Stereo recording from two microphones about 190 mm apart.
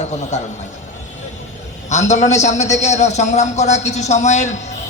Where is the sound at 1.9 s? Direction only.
35° left (ahead or behind).